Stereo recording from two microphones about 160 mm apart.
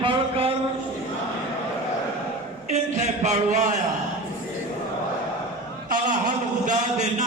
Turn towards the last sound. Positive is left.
turn(degrees=-50)  # may be behind; listen again after turning